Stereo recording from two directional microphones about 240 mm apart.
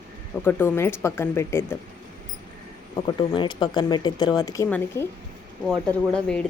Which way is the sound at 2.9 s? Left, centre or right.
Centre.